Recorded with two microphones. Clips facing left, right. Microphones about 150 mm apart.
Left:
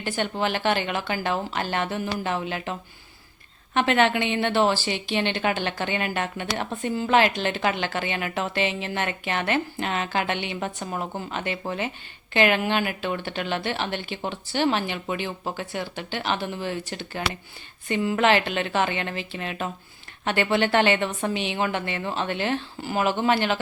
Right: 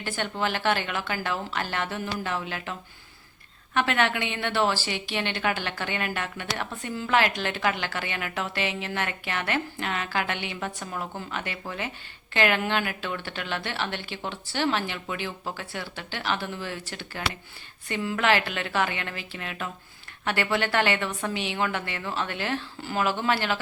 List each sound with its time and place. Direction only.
0.0 s a woman's voice: 20° left (ahead or behind)
3.8 s a woman's voice: 20° left (ahead or behind)